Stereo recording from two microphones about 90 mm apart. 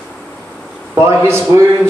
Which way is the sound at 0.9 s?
30° right (ahead or behind).